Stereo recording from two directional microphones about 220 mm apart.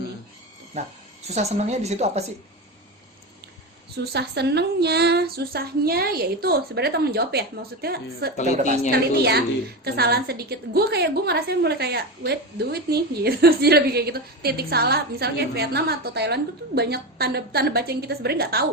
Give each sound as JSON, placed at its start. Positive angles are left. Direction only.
{"t": 0.7, "sound": "a woman's voice", "side_deg": -30}
{"t": 4.1, "sound": "a woman's voice", "side_deg": -50}
{"t": 8.4, "sound": "a woman's voice", "side_deg": -35}
{"t": 8.9, "sound": "a woman's voice", "side_deg": -45}